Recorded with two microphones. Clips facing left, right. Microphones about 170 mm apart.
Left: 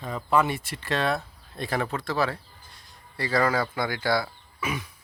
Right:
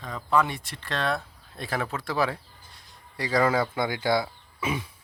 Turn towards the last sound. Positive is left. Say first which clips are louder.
# right 2 dB
turn(degrees=-25)  # may be behind; listen again after turning